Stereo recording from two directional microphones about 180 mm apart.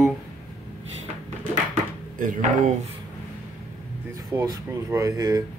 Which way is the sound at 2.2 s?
45° right (ahead or behind).